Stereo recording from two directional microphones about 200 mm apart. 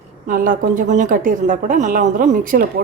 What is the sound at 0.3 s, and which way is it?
A woman's voice, 45° right (ahead or behind).